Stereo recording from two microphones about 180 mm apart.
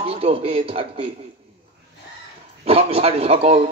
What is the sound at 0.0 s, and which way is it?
Speech, 30° right (ahead or behind).